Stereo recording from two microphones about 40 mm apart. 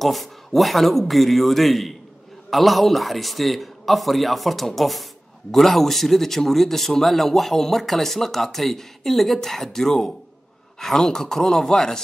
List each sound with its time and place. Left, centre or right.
0.0 s a man's voice: centre